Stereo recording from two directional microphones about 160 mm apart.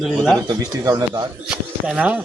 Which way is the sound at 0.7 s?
25° right (ahead or behind).